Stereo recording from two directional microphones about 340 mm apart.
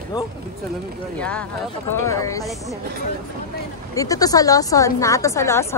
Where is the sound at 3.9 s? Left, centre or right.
Centre.